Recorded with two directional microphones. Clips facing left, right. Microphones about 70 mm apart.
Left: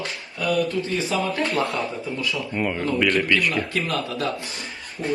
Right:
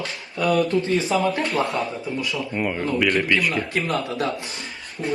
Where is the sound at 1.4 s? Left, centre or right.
Centre.